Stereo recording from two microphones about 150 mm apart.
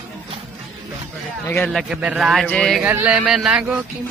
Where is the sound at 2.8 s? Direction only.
10° right (ahead or behind).